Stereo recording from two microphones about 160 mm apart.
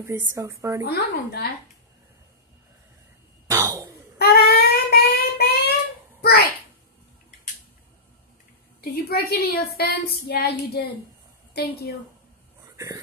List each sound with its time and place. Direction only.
0.0 s a woman's voice: 15° right (ahead or behind)
0.8 s speech: 80° left
3.4 s a sound: 20° right (ahead or behind)
4.2 s a sound: 80° left
8.8 s a woman's voice: 75° left (ahead or behind)
11.5 s a woman's voice: 75° left (ahead or behind)
12.7 s speech: 20° right (ahead or behind)